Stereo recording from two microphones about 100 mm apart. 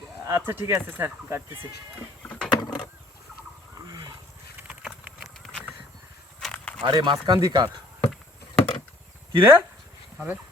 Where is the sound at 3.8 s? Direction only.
35° right (ahead or behind).